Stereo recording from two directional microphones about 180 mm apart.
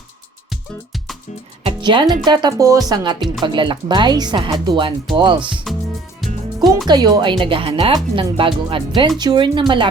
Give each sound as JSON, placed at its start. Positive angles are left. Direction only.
{"t": 0.5, "sound": "music", "side_deg": 0}
{"t": 1.6, "sound": "music", "side_deg": -25}
{"t": 2.2, "sound": "speech", "side_deg": -25}
{"t": 6.2, "sound": "music", "side_deg": 0}
{"t": 6.8, "sound": "speech", "side_deg": -25}